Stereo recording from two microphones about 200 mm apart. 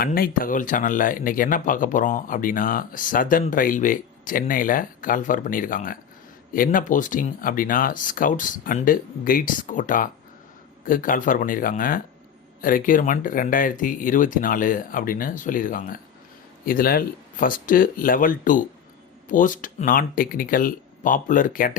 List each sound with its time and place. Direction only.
0.0 s speech: 45° left (ahead or behind)